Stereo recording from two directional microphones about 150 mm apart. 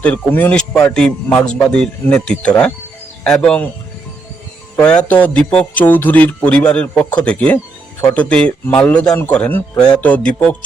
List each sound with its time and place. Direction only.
0.0 s speech: 10° left (ahead or behind)
4.9 s speech: 10° left (ahead or behind)